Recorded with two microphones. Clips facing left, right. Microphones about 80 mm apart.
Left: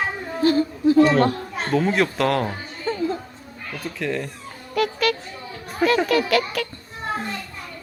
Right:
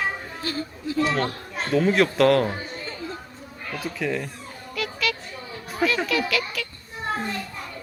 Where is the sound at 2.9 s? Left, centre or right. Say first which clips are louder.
Left 11 dB; left.